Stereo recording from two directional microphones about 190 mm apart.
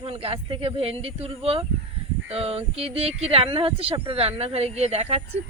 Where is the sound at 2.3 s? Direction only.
30° right (ahead or behind).